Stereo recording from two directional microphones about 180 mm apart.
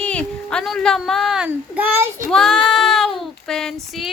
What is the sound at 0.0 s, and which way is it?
Speech, 5° left (ahead or behind).